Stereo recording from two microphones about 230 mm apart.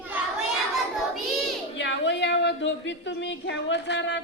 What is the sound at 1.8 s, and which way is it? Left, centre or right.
Speech, left.